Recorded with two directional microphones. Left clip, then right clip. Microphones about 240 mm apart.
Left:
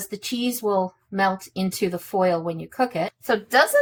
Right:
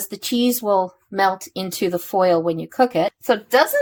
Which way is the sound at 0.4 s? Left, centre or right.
Right.